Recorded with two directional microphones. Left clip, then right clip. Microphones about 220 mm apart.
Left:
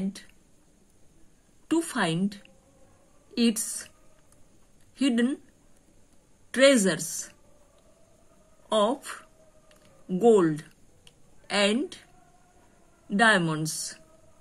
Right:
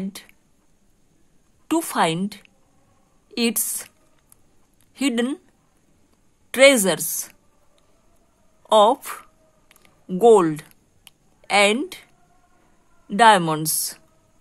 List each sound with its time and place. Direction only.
1.7 s speech: 45° right (ahead or behind)
4.9 s speech: 45° right (ahead or behind)
6.5 s speech: 45° right (ahead or behind)
8.6 s speech: 45° right (ahead or behind)
9.7 s a sound: 45° right (ahead or behind)
13.1 s speech: 45° right (ahead or behind)